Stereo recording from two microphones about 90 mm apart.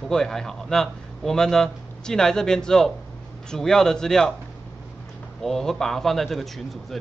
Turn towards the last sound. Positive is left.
turn(degrees=0)  # may be behind; listen again after turning